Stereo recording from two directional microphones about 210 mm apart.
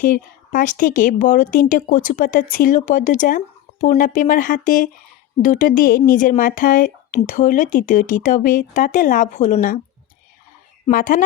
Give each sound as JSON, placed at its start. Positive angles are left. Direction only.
{"t": 0.0, "sound": "speech", "side_deg": 40}
{"t": 10.8, "sound": "speech", "side_deg": 40}